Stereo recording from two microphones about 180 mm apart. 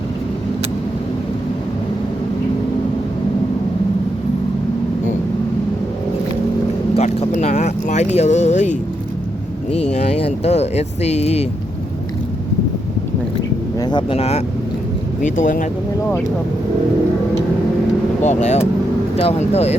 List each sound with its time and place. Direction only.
6.9 s a sound: 35° left (ahead or behind)
9.9 s speech: 40° left (ahead or behind)
13.7 s speech: 25° left (ahead or behind)
15.2 s speech: 45° left (ahead or behind)
18.2 s speech: 40° left (ahead or behind)